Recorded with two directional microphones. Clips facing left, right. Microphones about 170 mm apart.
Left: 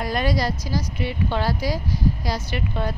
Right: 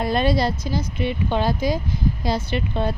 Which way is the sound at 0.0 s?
25° right (ahead or behind).